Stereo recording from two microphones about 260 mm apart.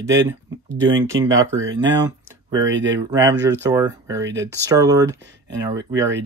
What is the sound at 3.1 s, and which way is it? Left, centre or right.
Speech, centre.